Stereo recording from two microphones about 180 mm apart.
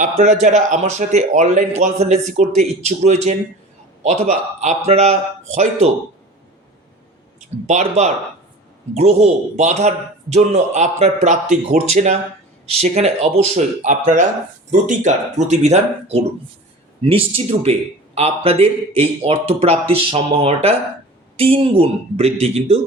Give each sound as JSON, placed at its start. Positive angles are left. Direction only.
{"t": 0.0, "sound": "a man's voice", "side_deg": -45}
{"t": 7.7, "sound": "a man's voice", "side_deg": -40}